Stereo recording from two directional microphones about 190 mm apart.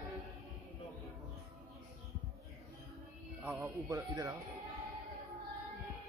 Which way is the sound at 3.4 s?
10° right (ahead or behind).